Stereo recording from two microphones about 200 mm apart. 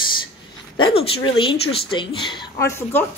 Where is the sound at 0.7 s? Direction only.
25° left (ahead or behind).